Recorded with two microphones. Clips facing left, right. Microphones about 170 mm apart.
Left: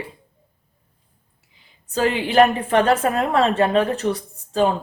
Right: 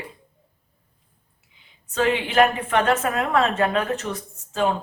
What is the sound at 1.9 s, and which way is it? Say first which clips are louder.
A woman's voice: left 2 dB; 35° left (ahead or behind).